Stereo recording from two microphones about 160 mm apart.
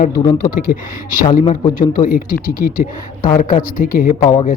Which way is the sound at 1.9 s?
65° left (ahead or behind).